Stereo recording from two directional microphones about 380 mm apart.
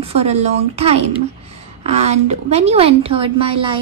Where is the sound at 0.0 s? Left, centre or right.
Centre.